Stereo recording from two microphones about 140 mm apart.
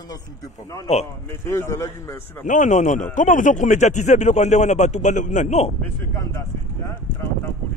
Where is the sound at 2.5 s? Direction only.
60° left (ahead or behind).